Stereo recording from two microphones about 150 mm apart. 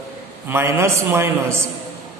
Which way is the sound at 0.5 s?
15° right (ahead or behind).